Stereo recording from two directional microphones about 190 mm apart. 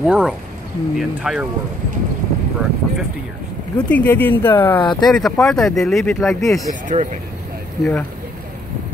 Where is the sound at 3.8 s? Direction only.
5° left (ahead or behind).